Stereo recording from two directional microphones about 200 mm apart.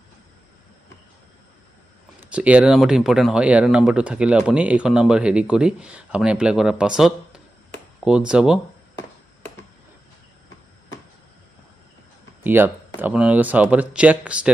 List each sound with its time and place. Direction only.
2.1 s speech: 5° right (ahead or behind)
12.4 s speech: 10° right (ahead or behind)